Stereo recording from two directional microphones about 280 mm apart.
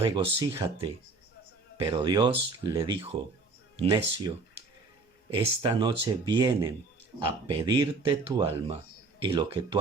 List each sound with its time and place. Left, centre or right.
0.0 s speech: centre
5.3 s speech: centre